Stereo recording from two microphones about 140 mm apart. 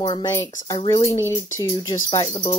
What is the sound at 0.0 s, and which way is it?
Speech, 30° left (ahead or behind).